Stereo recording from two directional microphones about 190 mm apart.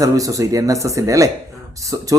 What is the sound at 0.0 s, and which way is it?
Speech, 20° right (ahead or behind).